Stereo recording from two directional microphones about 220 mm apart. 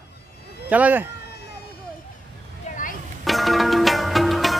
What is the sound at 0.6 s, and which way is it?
Speech, 5° right (ahead or behind).